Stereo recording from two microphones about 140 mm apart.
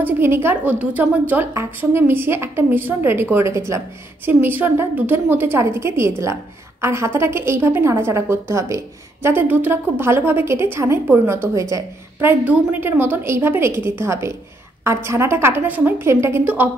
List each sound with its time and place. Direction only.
0.0 s a woman's voice: 15° right (ahead or behind)